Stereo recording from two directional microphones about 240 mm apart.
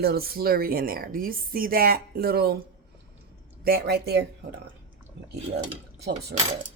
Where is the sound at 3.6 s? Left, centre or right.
Right.